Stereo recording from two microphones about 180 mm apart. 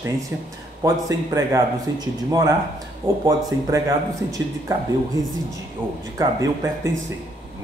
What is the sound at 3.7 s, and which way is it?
Speech, 20° right (ahead or behind).